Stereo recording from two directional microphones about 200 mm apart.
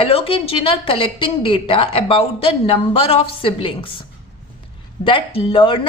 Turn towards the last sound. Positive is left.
turn(degrees=25)  # may be behind; listen again after turning